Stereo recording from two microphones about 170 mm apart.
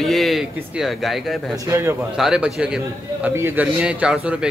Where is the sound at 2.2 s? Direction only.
5° right (ahead or behind).